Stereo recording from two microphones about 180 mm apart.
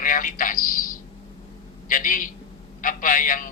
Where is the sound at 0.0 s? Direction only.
50° left (ahead or behind).